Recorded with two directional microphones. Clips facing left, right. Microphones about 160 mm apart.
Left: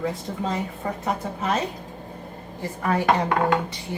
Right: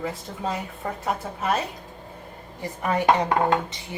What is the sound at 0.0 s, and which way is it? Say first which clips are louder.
Speech: left 2 dB; 5° right (ahead or behind).